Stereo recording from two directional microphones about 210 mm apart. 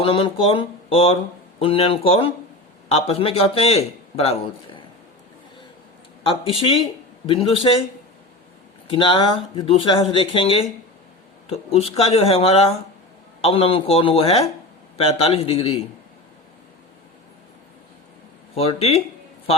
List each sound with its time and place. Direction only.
0.0 s speech: 25° left (ahead or behind)
6.2 s speech: 25° left (ahead or behind)
8.9 s speech: 25° left (ahead or behind)
18.5 s speech: 30° left (ahead or behind)